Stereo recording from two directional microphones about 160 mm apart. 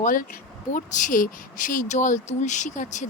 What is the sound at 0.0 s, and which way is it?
Speech, 55° left (ahead or behind).